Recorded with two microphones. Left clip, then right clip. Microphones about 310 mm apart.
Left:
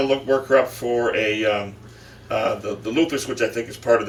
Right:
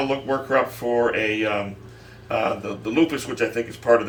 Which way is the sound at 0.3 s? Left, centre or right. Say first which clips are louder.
Left 4 dB; centre.